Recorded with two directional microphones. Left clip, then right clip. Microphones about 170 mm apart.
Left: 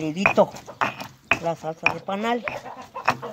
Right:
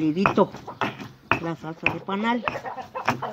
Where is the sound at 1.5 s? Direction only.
45° left (ahead or behind).